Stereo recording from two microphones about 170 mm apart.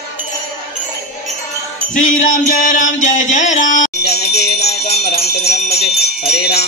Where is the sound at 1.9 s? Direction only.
50° left (ahead or behind).